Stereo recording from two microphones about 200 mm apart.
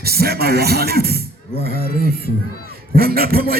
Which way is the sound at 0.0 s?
50° right (ahead or behind).